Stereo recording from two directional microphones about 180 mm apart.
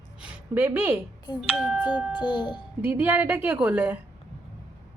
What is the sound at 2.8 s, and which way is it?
A woman's voice, 10° right (ahead or behind).